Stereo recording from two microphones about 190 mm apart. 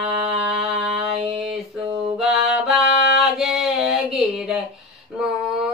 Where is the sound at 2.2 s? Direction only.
Centre (ahead or behind).